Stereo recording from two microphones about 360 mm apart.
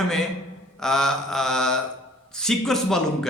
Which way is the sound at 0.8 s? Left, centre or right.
Centre.